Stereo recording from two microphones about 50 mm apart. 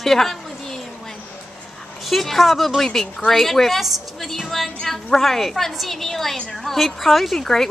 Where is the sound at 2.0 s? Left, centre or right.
Centre.